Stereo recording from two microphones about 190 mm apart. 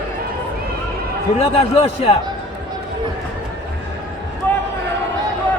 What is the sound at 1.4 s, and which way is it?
Speech, 30° left (ahead or behind).